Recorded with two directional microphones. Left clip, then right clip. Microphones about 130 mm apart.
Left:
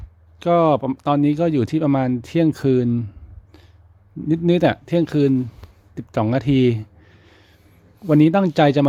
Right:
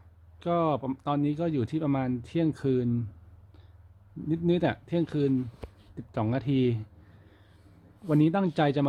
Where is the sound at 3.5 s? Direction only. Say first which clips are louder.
Left 12 dB; 40° left (ahead or behind).